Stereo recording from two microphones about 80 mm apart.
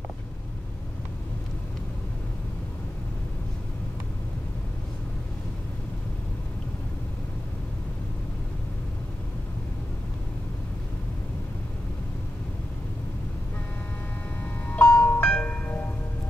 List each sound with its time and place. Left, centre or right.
14.7 s music: centre